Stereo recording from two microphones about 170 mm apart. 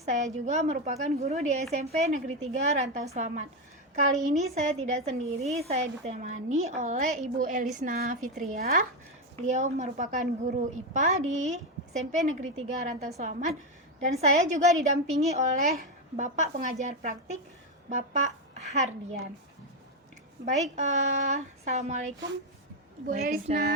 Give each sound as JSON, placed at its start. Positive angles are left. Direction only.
{"t": 0.0, "sound": "a woman's voice", "side_deg": -45}
{"t": 9.5, "sound": "a woman's voice", "side_deg": -45}
{"t": 20.4, "sound": "a woman's voice", "side_deg": -45}
{"t": 23.0, "sound": "speech", "side_deg": -60}